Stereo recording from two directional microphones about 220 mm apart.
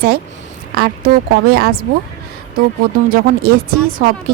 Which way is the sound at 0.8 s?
45° right (ahead or behind).